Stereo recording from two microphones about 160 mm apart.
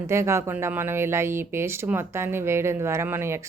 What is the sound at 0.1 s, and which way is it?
A woman's voice, 15° right (ahead or behind).